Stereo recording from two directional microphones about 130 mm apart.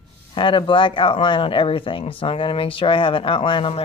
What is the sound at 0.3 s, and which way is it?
Speech, 40° left (ahead or behind).